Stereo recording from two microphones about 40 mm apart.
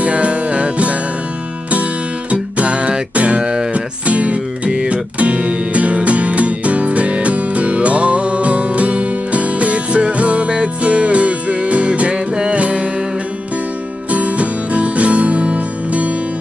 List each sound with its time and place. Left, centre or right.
0.0 s music: right
2.3 s music: right
14.1 s music: right